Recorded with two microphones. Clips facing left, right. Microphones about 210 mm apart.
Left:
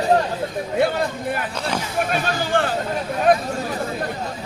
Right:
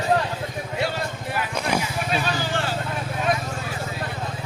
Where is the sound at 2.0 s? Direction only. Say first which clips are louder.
Left 3 dB; 50° left (ahead or behind).